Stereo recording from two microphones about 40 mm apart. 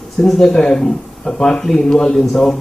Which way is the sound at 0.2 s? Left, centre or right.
Centre.